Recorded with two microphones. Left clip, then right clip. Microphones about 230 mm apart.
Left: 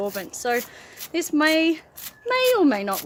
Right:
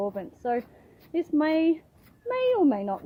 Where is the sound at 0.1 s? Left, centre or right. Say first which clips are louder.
Left 4 dB; centre.